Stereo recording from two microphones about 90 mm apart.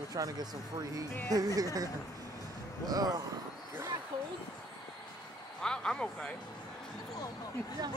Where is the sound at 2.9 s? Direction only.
45° right (ahead or behind).